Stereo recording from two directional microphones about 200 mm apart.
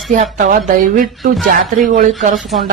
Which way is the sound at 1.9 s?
40° right (ahead or behind).